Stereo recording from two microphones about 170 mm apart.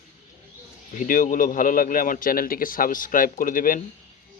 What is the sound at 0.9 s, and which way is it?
Speech, 50° left (ahead or behind).